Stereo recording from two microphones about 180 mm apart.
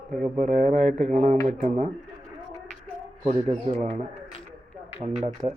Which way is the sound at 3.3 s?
35° right (ahead or behind).